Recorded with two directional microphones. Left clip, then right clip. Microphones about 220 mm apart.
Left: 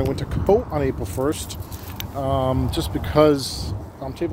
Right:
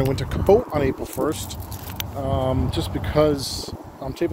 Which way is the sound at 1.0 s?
20° left (ahead or behind).